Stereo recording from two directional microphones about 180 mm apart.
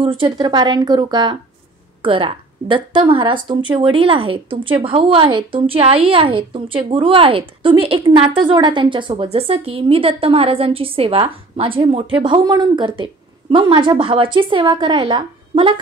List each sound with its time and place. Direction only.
0.0 s speech: 30° right (ahead or behind)